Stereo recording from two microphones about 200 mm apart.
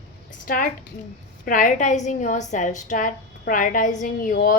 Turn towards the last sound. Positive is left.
turn(degrees=45)  # may be behind; listen again after turning